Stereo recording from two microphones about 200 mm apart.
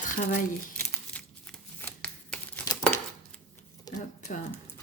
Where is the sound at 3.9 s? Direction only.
20° left (ahead or behind).